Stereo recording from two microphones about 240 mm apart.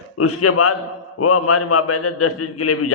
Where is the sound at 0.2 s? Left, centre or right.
Left.